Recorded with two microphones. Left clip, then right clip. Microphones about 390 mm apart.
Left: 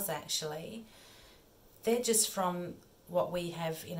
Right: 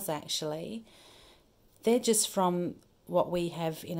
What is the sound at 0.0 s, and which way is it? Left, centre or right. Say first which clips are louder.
Speech: right 3 dB; centre.